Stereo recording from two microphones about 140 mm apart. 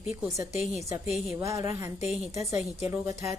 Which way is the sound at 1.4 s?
20° right (ahead or behind).